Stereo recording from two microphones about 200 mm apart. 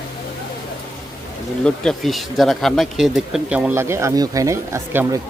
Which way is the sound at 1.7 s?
Centre (ahead or behind).